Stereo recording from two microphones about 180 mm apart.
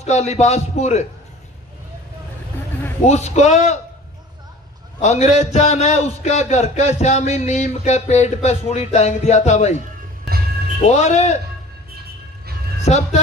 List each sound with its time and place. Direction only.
0.0 s a man's voice: 35° left (ahead or behind)
3.1 s a man's voice: 40° left (ahead or behind)
5.0 s a man's voice: 40° left (ahead or behind)
10.8 s a man's voice: 40° left (ahead or behind)
12.8 s a man's voice: 35° left (ahead or behind)